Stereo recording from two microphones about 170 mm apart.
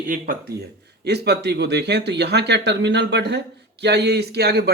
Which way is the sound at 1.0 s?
80° right.